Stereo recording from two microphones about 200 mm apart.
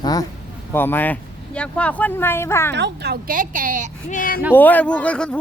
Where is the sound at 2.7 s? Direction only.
55° right (ahead or behind); by 3.9 s 40° right (ahead or behind).